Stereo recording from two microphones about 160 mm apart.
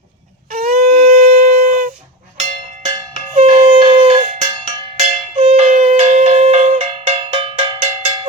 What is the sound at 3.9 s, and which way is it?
Cowbell, 30° right (ahead or behind).